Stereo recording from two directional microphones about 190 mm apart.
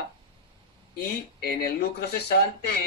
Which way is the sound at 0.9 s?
55° left (ahead or behind).